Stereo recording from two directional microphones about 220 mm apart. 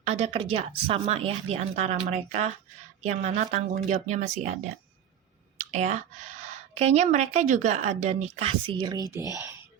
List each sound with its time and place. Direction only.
0.0 s speech: 30° right (ahead or behind)
5.5 s speech: 30° right (ahead or behind); by 9.2 s 15° right (ahead or behind)